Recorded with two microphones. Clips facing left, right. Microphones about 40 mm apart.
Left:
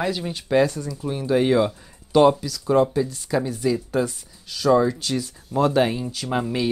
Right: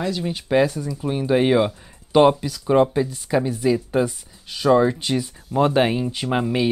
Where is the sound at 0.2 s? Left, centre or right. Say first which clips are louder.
Right 2 dB; centre.